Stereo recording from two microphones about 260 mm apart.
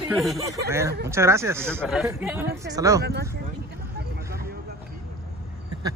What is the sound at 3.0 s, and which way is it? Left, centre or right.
Speech, right.